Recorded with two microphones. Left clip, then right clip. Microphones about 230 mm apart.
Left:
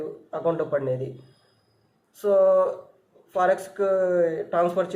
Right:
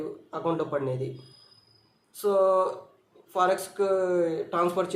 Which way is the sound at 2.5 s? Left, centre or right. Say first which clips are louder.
Left 4 dB; right.